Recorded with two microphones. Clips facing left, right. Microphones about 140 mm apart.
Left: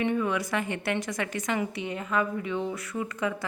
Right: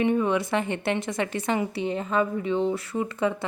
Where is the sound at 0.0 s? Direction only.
25° right (ahead or behind).